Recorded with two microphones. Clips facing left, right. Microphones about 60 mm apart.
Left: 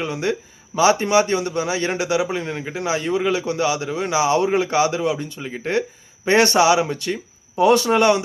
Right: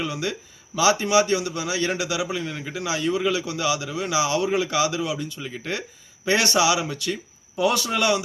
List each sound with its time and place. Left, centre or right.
0.0 s a man's voice: left